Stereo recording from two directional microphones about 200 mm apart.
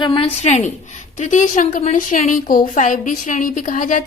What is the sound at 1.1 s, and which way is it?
A woman's voice, 35° left (ahead or behind).